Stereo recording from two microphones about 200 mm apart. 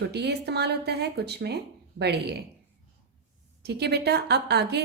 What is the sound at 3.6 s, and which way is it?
Speech, 55° right (ahead or behind).